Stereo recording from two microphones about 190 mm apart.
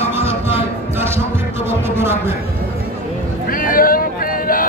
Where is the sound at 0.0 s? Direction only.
10° right (ahead or behind).